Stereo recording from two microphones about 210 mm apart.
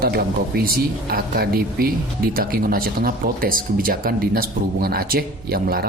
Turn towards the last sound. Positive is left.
turn(degrees=-45)  # may be behind; listen again after turning